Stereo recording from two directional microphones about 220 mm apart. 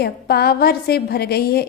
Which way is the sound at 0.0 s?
45° left (ahead or behind).